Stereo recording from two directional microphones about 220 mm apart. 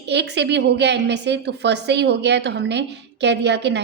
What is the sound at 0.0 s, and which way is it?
A woman's voice, 50° right (ahead or behind).